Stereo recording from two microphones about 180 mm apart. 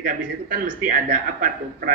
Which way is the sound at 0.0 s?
50° right (ahead or behind).